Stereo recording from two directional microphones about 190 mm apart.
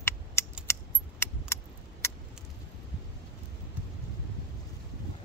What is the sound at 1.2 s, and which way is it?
Keys jangling, 15° left (ahead or behind).